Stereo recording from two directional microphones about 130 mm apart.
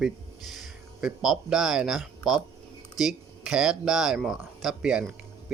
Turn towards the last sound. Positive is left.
turn(degrees=-5)  # may be behind; listen again after turning